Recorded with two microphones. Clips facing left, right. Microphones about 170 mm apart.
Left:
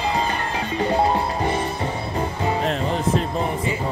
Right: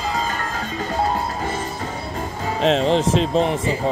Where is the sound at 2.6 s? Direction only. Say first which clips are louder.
Right 5 dB; 90° right.